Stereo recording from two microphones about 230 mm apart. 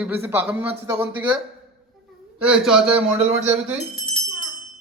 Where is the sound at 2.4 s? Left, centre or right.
Centre.